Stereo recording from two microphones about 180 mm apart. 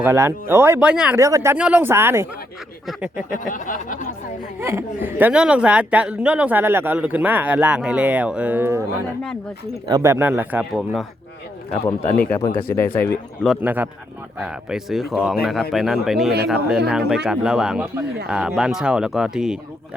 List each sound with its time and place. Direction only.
0.0 s speech: 15° right (ahead or behind)
3.3 s speech: 50° left (ahead or behind)
4.6 s speech: 15° right (ahead or behind)
12.3 s speech: 20° left (ahead or behind)
13.6 s speech: 10° right (ahead or behind)